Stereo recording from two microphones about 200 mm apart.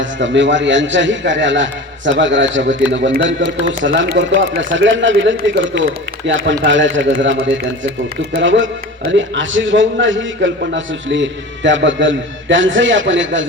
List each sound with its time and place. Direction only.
0.0 s a man's voice: 65° right (ahead or behind)